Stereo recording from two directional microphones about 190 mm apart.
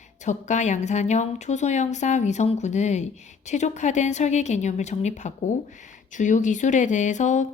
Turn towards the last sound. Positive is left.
turn(degrees=40)  # may be behind; listen again after turning